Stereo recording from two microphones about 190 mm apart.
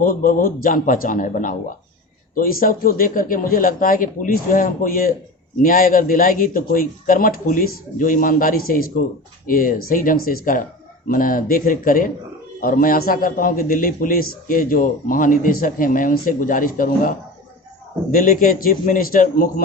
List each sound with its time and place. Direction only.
0.0 s a man's voice: 45° left (ahead or behind)